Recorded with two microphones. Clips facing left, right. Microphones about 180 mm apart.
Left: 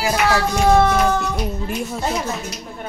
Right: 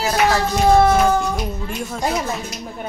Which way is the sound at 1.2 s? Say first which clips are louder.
Right 1 dB; 5° left (ahead or behind).